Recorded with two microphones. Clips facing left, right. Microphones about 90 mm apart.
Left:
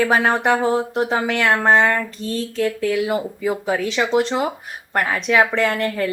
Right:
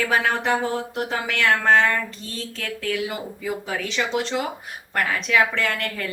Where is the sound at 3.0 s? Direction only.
40° left (ahead or behind).